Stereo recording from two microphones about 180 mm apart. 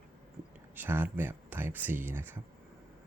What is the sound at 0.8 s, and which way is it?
Speech, 10° right (ahead or behind).